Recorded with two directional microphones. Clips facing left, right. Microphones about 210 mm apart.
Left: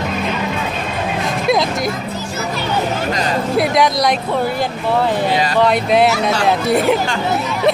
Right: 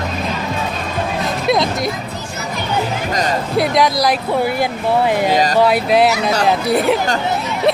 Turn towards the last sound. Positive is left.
turn(degrees=0)  # may be behind; listen again after turning